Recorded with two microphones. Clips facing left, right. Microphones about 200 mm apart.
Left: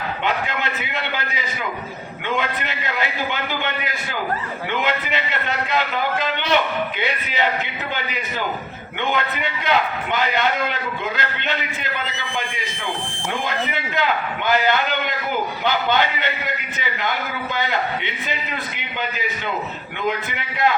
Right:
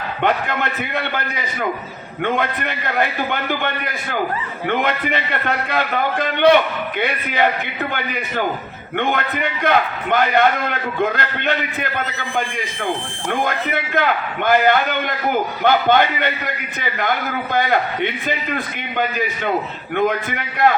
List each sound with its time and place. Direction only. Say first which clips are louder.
0.2 s a man's voice: right 6 dB; 55° right (ahead or behind)
4.7 s a man's voice: right 4 dB; 55° right (ahead or behind)
17.5 s a man's voice: right 5 dB; 55° right (ahead or behind)